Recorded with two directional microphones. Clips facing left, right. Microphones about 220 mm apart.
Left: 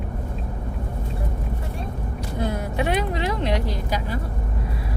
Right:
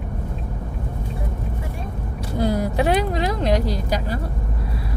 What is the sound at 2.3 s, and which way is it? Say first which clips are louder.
Vehicle: right 5 dB; 35° right (ahead or behind).